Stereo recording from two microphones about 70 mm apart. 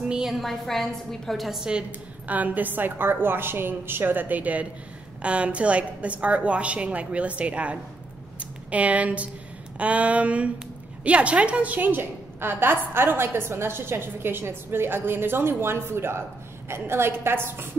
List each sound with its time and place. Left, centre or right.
0.1 s a woman's voice: centre; by 17.6 s right